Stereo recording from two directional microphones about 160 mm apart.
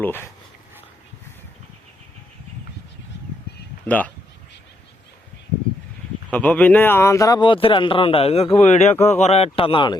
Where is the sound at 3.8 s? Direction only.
10° left (ahead or behind).